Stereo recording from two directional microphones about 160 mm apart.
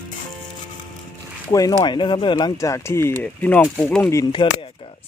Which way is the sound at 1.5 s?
25° left (ahead or behind).